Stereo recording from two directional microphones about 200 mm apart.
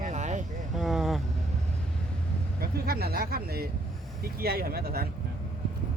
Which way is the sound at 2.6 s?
50° right (ahead or behind).